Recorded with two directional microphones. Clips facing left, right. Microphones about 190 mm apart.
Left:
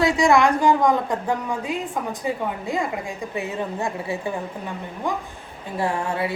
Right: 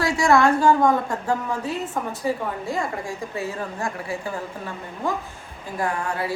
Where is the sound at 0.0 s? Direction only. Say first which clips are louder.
Left 1 dB; 20° left (ahead or behind).